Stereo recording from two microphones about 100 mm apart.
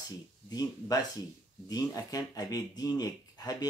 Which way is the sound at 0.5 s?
40° left (ahead or behind).